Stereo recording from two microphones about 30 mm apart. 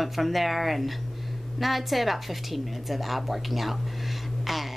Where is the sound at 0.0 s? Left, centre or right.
Centre.